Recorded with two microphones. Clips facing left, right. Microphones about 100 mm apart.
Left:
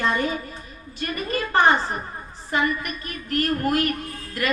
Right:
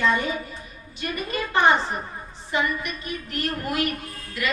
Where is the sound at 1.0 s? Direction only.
45° left (ahead or behind).